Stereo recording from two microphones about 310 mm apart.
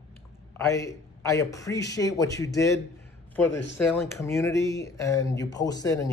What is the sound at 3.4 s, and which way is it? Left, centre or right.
Speech, left.